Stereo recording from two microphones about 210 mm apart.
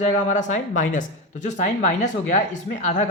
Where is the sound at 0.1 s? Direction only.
35° left (ahead or behind).